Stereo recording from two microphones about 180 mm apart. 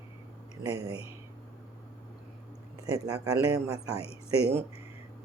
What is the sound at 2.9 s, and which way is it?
Speech, 20° right (ahead or behind).